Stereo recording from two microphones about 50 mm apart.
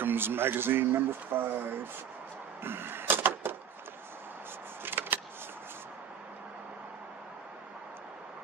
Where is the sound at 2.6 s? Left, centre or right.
Right.